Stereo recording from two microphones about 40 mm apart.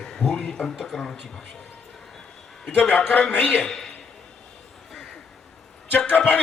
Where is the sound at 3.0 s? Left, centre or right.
Left.